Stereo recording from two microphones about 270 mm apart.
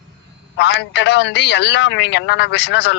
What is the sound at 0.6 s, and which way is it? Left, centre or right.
A man's voice, left.